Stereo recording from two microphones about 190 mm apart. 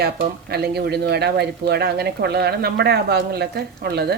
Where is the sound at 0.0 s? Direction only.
55° right (ahead or behind).